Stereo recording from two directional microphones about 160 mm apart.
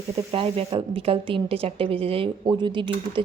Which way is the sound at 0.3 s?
35° right (ahead or behind).